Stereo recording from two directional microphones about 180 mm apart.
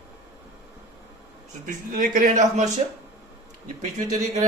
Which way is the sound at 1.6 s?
45° right (ahead or behind).